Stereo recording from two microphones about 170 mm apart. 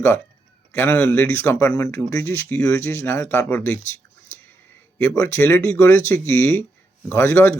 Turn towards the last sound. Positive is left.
turn(degrees=15)  # may be behind; listen again after turning